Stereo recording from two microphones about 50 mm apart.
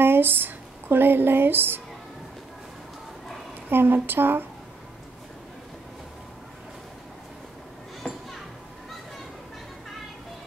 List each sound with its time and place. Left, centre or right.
0.0 s speech: right
3.7 s speech: right
8.0 s children playing: left